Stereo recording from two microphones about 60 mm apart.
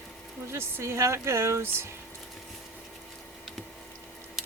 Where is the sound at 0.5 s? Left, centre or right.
Right.